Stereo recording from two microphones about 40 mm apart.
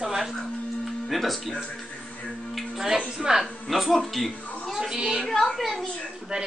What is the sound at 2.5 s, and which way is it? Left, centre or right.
A woman's voice, centre.